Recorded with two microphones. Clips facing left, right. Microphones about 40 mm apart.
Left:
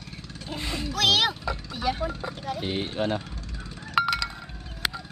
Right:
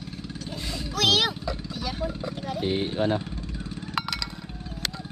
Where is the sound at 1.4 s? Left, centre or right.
Centre.